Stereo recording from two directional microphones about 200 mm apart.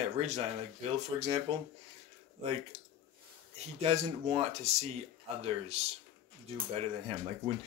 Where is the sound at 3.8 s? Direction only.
30° right (ahead or behind).